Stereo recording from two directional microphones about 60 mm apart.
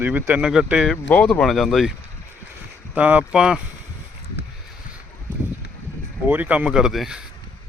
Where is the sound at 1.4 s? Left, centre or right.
Centre.